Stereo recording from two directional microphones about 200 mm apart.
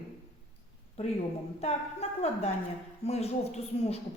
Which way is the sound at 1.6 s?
30° left (ahead or behind).